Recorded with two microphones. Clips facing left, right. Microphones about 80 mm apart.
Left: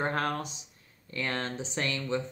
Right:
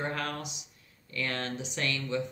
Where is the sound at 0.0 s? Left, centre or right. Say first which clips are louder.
Left 4 dB; left.